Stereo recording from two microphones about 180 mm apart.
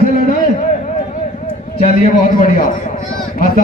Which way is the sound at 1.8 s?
50° left (ahead or behind).